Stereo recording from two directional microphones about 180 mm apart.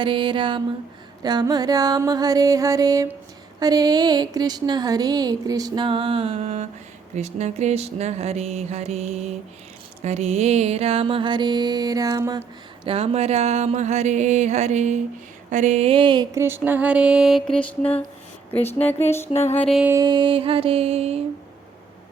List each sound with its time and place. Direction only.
0.0 s a woman's voice: 25° right (ahead or behind)
7.2 s mantra: 40° right (ahead or behind)
15.4 s music: 40° right (ahead or behind); by 18.0 s 10° left (ahead or behind)
18.8 s speech: 10° left (ahead or behind)
19.3 s music: 35° left (ahead or behind)
19.6 s music: centre (ahead or behind)
19.9 s mantra: 20° right (ahead or behind)